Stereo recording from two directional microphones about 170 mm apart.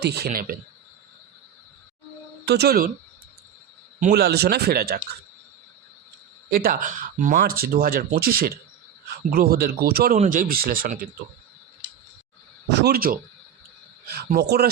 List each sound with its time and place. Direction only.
0.0 s speech: 70° right (ahead or behind)
2.4 s speech: 75° right (ahead or behind)
4.1 s speech: 70° right (ahead or behind)
6.5 s speech: 60° right (ahead or behind)
10.2 s speech: 50° right (ahead or behind)
12.7 s speech: 70° right (ahead or behind)